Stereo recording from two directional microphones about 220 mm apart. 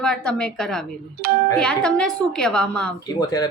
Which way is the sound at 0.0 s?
5° left (ahead or behind).